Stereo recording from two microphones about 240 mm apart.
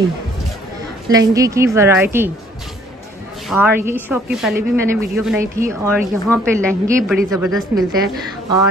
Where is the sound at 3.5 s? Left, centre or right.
Centre.